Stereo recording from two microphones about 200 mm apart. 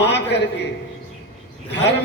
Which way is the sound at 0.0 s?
60° left (ahead or behind).